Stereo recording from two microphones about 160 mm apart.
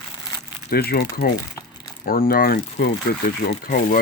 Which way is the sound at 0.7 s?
75° left (ahead or behind).